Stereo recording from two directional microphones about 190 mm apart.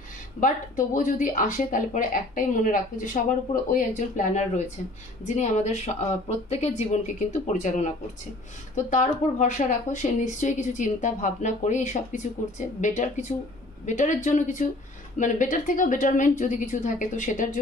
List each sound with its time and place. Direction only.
0.4 s a woman's voice: 40° left (ahead or behind)